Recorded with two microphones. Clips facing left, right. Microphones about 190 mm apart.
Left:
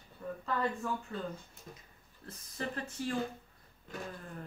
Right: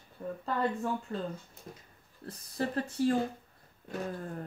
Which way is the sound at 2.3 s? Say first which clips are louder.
Right 6 dB; 35° right (ahead or behind).